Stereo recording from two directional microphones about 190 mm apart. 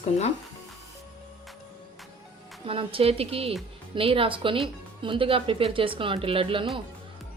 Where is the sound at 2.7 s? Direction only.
30° right (ahead or behind).